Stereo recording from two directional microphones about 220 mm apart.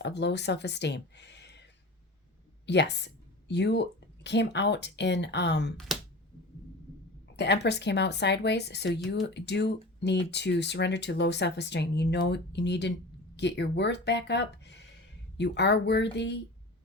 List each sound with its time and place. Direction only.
0.0 s speech: 50° left (ahead or behind)
2.6 s speech: 50° left (ahead or behind)
7.3 s speech: 50° left (ahead or behind)